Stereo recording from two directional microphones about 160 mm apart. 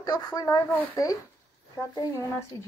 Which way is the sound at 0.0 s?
25° left (ahead or behind).